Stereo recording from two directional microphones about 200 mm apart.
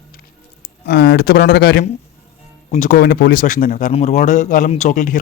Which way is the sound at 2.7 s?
40° left (ahead or behind).